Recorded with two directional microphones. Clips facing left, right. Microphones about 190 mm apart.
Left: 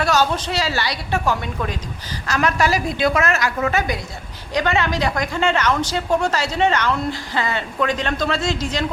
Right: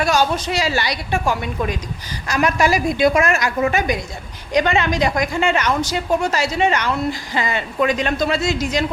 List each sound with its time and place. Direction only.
0.0 s a woman's voice: 10° right (ahead or behind)